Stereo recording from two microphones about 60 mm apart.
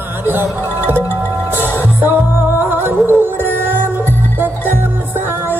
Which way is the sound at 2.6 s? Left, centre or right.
Right.